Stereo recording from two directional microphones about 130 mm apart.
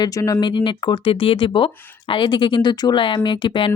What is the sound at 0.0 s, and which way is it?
Speech, 30° left (ahead or behind).